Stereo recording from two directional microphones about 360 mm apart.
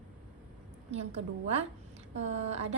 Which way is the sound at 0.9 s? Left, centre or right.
Centre.